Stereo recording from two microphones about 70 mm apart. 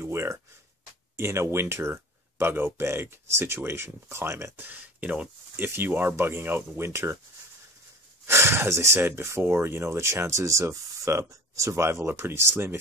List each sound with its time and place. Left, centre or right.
0.0 s speech: right
4.6 s speech: right
5.6 s speech: right
8.3 s speech: right